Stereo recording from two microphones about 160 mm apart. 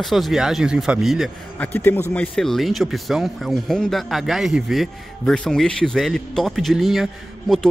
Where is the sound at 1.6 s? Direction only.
10° left (ahead or behind).